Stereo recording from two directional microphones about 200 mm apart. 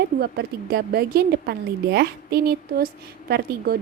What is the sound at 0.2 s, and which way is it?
A woman's voice, 55° right (ahead or behind).